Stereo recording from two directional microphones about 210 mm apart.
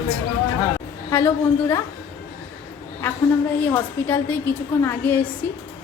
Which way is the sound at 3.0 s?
10° left (ahead or behind).